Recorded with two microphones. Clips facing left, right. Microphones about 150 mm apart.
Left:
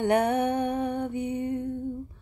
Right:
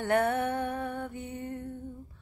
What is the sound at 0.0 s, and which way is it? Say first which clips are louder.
Music: left 4 dB; 20° left (ahead or behind).